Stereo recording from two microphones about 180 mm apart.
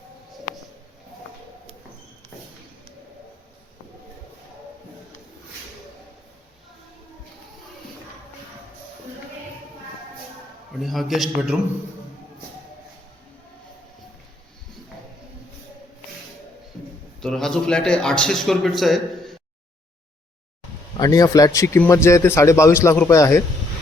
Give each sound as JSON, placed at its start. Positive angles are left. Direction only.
{"t": 10.8, "sound": "a man's voice", "side_deg": 0}
{"t": 17.2, "sound": "a man's voice", "side_deg": 5}
{"t": 21.0, "sound": "a man's voice", "side_deg": 20}